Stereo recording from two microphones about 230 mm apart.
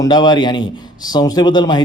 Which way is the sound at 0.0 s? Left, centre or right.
Centre.